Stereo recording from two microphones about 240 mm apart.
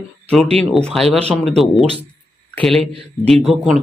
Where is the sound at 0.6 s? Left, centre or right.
Centre.